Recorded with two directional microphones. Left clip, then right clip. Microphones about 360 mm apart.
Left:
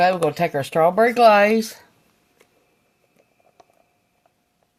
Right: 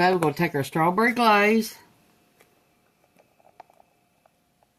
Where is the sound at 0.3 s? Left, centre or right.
Left.